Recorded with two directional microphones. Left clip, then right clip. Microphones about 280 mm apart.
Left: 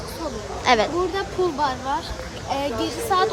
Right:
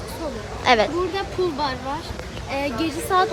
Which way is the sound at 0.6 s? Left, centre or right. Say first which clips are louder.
Right 1 dB; centre.